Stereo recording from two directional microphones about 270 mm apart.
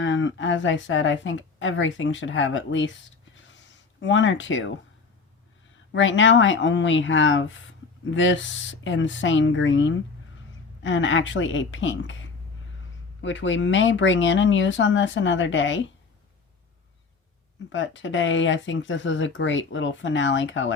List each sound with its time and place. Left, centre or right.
0.0 s speech: left
3.3 s a sound: left
4.0 s speech: left
5.9 s speech: left
17.7 s speech: left